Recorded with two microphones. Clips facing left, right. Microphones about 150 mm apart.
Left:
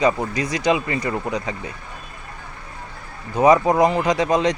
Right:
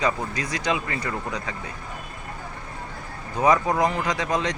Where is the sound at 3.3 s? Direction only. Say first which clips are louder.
Left 6 dB; 20° left (ahead or behind).